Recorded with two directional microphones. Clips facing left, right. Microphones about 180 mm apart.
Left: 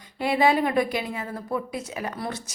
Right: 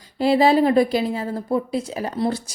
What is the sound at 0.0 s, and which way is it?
A woman's voice, 35° right (ahead or behind).